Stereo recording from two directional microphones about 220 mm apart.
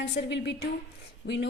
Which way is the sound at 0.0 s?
50° left (ahead or behind).